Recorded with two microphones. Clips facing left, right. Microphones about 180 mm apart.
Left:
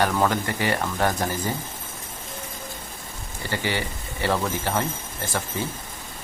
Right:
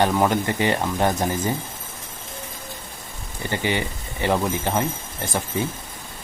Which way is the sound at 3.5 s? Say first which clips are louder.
Right 3 dB; 20° right (ahead or behind).